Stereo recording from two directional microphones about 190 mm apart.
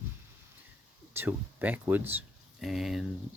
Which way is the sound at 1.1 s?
10° right (ahead or behind).